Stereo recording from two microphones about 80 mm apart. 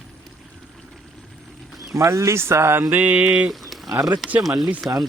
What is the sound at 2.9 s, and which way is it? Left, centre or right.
Mantra, right.